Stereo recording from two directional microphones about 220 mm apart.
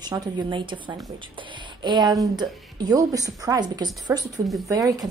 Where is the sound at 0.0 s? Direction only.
20° right (ahead or behind).